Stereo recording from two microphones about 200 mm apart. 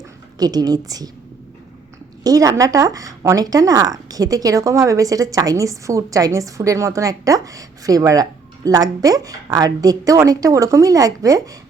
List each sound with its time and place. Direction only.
0.3 s a woman's voice: 20° right (ahead or behind)
2.2 s speech: 15° right (ahead or behind)